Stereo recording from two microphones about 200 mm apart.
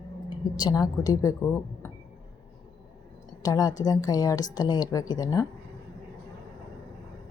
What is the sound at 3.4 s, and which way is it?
A woman's voice, 20° left (ahead or behind).